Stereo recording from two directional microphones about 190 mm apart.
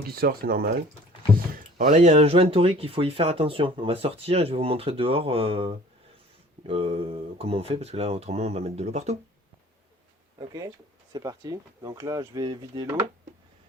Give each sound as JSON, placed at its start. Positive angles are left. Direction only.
{"t": 0.2, "sound": "speech", "side_deg": -50}
{"t": 1.9, "sound": "speech", "side_deg": -35}
{"t": 11.1, "sound": "speech", "side_deg": -20}